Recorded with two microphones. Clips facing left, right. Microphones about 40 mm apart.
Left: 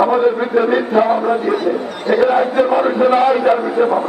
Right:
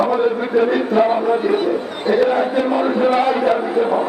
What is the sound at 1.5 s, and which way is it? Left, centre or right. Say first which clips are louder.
Speech: left 1 dB; right.